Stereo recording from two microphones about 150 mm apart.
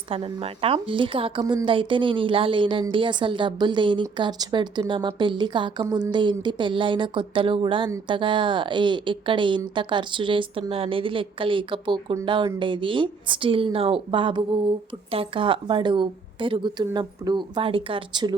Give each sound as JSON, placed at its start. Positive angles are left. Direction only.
{"t": 0.1, "sound": "a woman's voice", "side_deg": -40}